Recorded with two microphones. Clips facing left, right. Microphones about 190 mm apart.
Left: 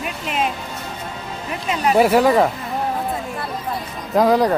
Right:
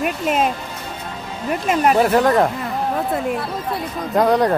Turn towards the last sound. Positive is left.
turn(degrees=0)  # may be behind; listen again after turning